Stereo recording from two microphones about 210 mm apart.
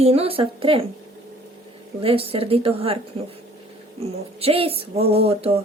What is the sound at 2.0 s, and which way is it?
Speech, 25° right (ahead or behind).